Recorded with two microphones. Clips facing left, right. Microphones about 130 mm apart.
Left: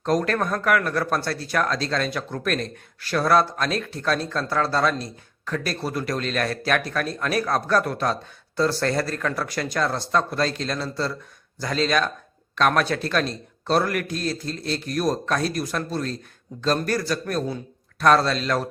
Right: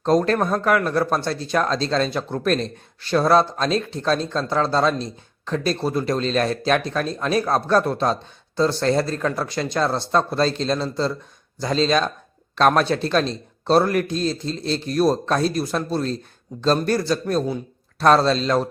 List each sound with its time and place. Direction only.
0.0 s speech: 30° right (ahead or behind)